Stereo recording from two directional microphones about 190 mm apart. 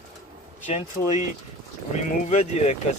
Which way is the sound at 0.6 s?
40° left (ahead or behind).